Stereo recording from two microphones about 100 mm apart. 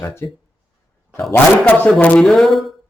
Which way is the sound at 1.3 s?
20° left (ahead or behind).